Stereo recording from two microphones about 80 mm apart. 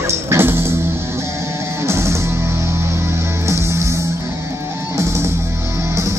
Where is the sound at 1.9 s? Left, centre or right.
Right.